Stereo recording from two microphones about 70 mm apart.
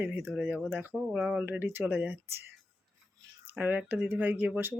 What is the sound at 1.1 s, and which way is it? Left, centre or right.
Speech, centre.